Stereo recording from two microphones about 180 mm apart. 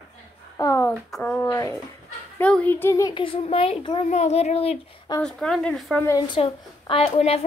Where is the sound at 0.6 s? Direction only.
15° left (ahead or behind).